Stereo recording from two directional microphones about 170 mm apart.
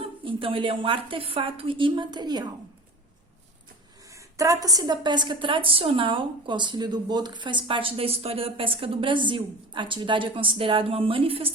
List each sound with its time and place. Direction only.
0.0 s a woman's voice: 30° right (ahead or behind)
4.1 s a woman's voice: 20° right (ahead or behind)